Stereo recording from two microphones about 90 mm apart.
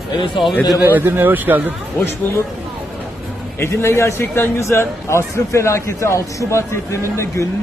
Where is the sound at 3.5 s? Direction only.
30° left (ahead or behind).